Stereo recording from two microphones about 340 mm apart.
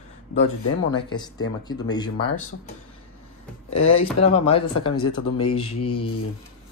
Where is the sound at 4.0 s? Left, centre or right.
Centre.